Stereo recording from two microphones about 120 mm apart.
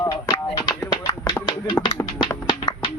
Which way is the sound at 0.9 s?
40° left (ahead or behind).